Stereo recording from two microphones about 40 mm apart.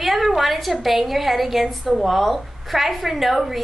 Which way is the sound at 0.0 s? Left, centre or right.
Centre.